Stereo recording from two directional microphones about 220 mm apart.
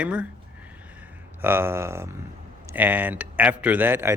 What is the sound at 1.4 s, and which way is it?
A man's voice, 10° right (ahead or behind).